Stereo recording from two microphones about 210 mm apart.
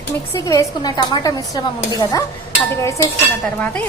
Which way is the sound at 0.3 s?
15° left (ahead or behind).